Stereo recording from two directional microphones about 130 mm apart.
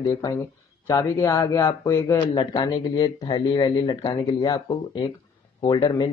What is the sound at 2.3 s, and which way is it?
Speech, 35° left (ahead or behind).